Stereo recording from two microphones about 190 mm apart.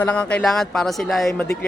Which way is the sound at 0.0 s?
5° left (ahead or behind).